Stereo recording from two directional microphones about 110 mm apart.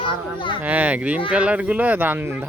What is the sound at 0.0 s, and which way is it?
Speech, 50° left (ahead or behind).